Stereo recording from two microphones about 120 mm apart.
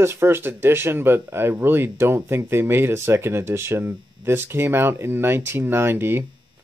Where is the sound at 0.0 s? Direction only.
20° right (ahead or behind).